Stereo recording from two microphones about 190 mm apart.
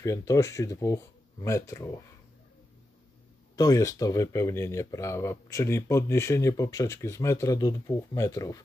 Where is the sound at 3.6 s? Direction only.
15° left (ahead or behind).